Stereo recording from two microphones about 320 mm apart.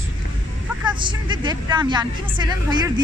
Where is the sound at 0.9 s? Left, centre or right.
Centre.